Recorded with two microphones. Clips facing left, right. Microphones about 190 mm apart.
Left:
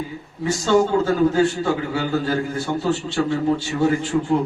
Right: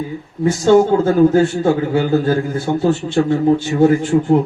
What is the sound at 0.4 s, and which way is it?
A man's voice, 50° right (ahead or behind).